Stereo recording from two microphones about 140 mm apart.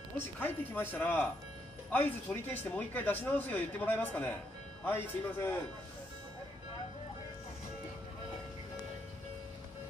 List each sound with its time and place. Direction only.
0.4 s speech: 15° left (ahead or behind)